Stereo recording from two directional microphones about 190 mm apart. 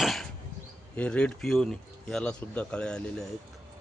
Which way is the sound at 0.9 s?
5° left (ahead or behind).